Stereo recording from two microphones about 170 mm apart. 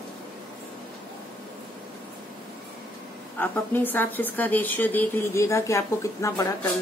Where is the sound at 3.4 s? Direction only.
10° left (ahead or behind).